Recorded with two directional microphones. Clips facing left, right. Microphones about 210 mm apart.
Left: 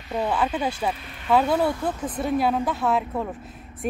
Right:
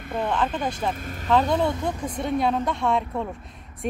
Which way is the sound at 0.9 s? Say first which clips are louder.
Right 6 dB; 45° right (ahead or behind).